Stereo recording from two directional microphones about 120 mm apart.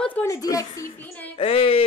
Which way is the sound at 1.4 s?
55° left (ahead or behind).